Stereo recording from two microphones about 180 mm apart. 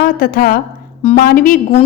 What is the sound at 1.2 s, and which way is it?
Speech, 50° left (ahead or behind).